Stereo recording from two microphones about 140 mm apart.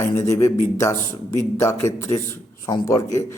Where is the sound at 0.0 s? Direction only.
20° left (ahead or behind).